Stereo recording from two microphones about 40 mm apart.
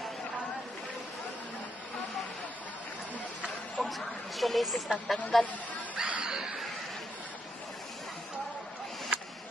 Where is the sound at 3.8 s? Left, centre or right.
Centre.